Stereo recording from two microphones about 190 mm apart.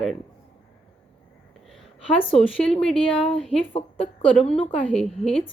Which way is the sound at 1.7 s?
5° left (ahead or behind).